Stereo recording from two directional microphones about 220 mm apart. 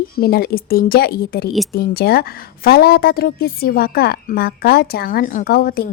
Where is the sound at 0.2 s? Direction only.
45° left (ahead or behind).